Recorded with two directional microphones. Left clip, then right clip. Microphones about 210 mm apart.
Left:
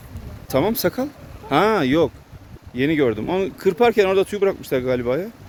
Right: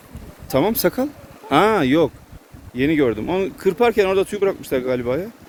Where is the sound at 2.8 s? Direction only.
10° left (ahead or behind).